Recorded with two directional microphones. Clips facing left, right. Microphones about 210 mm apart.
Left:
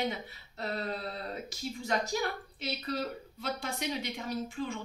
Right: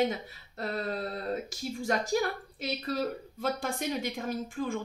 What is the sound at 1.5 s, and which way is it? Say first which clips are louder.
A woman's voice: right 3 dB; 50° right (ahead or behind).